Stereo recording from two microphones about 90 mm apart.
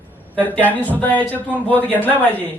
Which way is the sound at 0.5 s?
20° left (ahead or behind).